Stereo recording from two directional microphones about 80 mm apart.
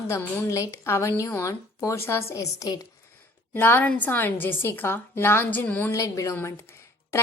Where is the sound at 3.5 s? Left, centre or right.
Left.